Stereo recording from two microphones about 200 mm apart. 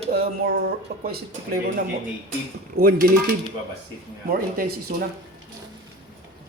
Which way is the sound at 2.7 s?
45° right (ahead or behind).